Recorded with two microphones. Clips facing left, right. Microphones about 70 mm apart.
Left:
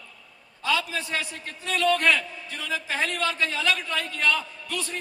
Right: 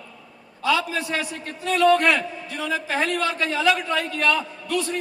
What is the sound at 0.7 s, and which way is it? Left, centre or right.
A man's voice, right.